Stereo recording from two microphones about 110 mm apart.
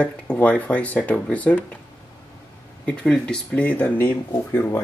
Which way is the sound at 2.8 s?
10° left (ahead or behind).